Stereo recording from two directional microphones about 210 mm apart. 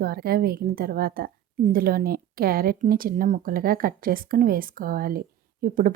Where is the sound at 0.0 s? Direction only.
45° right (ahead or behind).